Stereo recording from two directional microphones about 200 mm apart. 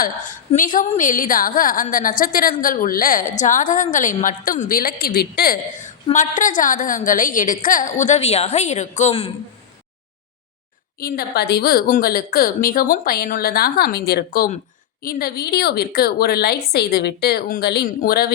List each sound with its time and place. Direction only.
0.0 s a woman's voice: 40° left (ahead or behind)
5.8 s a woman's voice: 40° left (ahead or behind)
11.0 s a woman's voice: 50° left (ahead or behind)